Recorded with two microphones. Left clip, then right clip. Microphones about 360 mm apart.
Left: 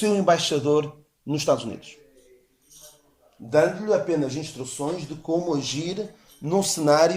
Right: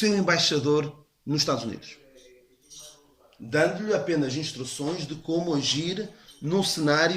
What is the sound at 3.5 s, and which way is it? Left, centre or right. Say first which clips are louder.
Speech: left 4 dB; centre.